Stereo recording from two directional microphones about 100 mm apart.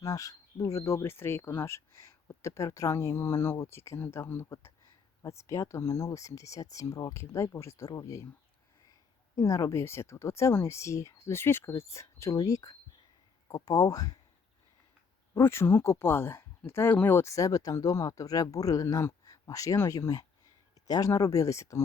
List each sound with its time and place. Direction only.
0.0 s speech: 35° left (ahead or behind)
15.4 s speech: 25° left (ahead or behind)